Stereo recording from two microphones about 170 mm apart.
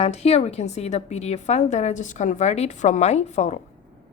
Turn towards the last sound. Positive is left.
turn(degrees=45)  # may be behind; listen again after turning